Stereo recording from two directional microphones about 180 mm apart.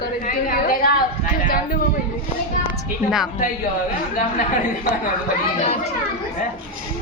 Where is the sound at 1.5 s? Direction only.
55° left (ahead or behind).